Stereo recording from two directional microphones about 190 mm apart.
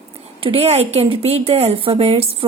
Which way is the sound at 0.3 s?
30° right (ahead or behind).